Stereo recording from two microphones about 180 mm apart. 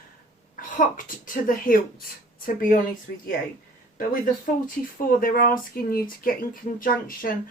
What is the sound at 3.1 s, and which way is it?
A woman's voice, 50° left (ahead or behind).